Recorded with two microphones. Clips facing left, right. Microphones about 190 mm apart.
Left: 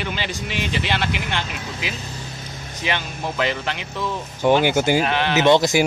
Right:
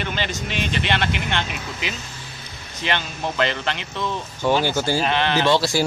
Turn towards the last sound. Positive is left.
turn(degrees=20)  # may be behind; listen again after turning